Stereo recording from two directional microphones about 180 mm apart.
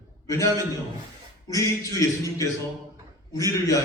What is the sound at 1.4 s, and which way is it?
Speech, 20° left (ahead or behind).